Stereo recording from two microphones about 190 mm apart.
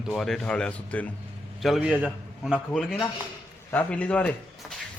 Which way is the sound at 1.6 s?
5° right (ahead or behind).